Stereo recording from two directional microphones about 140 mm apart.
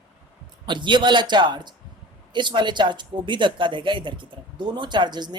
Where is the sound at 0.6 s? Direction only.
35° right (ahead or behind).